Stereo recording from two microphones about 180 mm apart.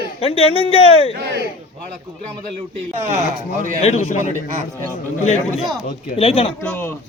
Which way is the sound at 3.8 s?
40° left (ahead or behind).